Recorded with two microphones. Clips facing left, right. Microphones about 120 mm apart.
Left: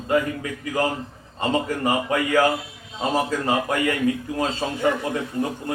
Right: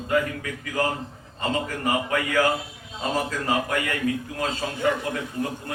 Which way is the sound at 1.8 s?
25° left (ahead or behind).